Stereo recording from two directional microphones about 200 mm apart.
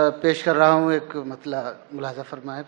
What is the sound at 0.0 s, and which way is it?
A man's voice, 15° right (ahead or behind).